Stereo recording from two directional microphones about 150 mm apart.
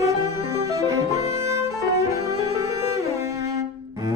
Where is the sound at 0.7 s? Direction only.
20° right (ahead or behind).